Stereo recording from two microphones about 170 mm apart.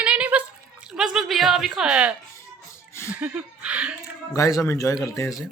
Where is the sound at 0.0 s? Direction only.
5° right (ahead or behind).